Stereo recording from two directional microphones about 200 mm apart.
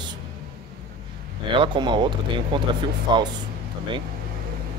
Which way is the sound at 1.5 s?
25° right (ahead or behind).